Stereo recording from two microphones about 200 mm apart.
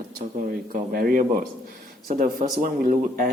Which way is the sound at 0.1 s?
40° right (ahead or behind).